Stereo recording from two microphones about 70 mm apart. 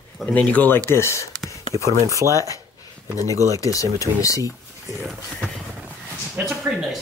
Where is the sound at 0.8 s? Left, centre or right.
Left.